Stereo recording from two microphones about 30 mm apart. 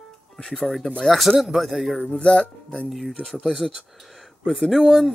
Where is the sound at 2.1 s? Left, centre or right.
Left.